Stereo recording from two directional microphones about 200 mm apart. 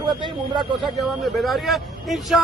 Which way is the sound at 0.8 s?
Centre (ahead or behind).